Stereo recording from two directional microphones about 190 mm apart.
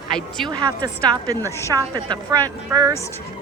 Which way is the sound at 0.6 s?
20° right (ahead or behind).